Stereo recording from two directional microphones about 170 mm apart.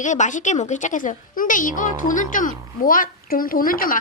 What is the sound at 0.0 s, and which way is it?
A woman's voice, 45° left (ahead or behind).